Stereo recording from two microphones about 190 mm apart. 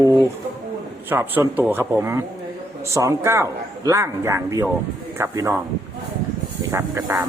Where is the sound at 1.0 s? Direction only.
10° right (ahead or behind).